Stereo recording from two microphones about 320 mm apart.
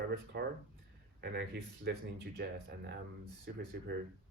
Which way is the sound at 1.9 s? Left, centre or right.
Right.